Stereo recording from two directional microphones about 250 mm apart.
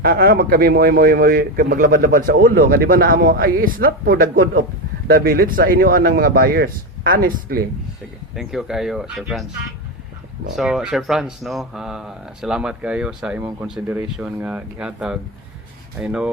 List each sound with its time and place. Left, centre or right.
0.0 s speech: right
8.4 s speech: centre
10.5 s speech: centre